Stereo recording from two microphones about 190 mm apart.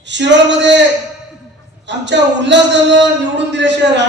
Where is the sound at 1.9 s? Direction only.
70° right (ahead or behind).